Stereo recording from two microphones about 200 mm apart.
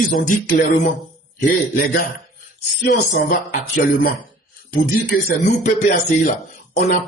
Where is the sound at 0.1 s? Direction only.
40° left (ahead or behind).